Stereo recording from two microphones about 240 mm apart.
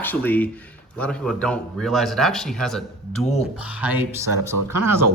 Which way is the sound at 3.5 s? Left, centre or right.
Centre.